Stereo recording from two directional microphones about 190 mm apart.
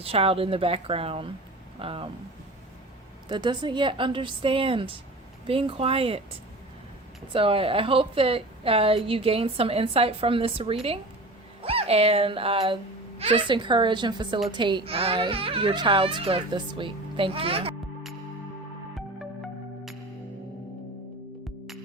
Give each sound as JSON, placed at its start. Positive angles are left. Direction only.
{"t": 0.0, "sound": "speech", "side_deg": -30}
{"t": 3.2, "sound": "speech", "side_deg": -25}
{"t": 7.3, "sound": "speech", "side_deg": -30}